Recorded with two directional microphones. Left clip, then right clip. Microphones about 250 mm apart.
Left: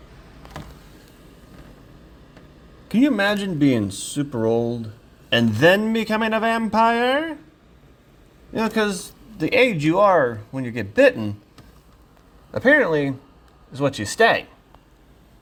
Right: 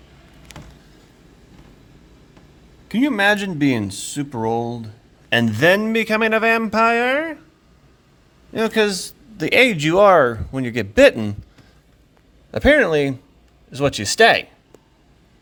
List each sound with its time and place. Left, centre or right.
2.9 s a man's voice: centre
8.5 s speech: centre
12.5 s speech: right